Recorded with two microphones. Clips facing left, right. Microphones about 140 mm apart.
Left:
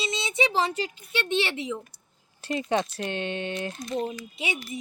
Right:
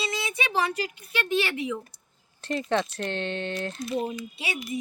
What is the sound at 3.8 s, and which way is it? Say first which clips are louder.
Speech: right 1 dB; 5° right (ahead or behind).